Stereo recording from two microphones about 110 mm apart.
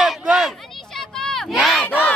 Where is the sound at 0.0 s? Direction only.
5° right (ahead or behind).